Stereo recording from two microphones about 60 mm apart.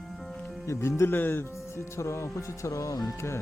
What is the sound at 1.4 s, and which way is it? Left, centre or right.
Speech, left.